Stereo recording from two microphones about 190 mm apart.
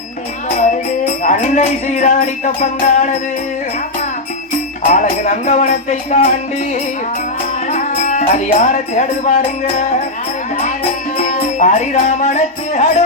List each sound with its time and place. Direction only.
1.0 s music: 40° left (ahead or behind)
4.8 s music: 40° left (ahead or behind)
7.7 s music: 40° left (ahead or behind)
11.2 s music: 35° left (ahead or behind)